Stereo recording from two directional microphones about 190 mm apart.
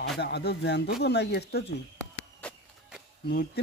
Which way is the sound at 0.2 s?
60° left (ahead or behind).